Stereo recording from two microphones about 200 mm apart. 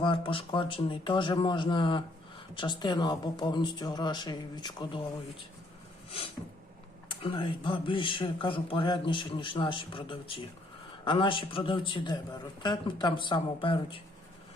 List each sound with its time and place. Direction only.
0.0 s speech: 25° left (ahead or behind)
6.1 s a sound: 30° left (ahead or behind)
7.1 s speech: 25° left (ahead or behind)